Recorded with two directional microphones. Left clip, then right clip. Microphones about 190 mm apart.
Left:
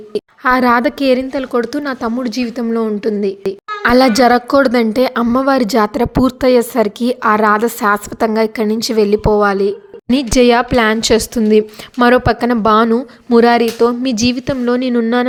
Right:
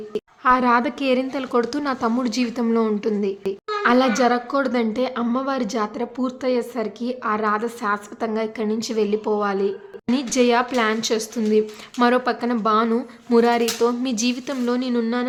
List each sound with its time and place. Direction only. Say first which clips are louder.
0.1 s a woman's voice: left 5 dB; 30° left (ahead or behind)